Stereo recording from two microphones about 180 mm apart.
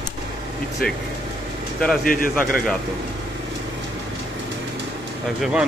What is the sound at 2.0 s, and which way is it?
Speech, 50° left (ahead or behind).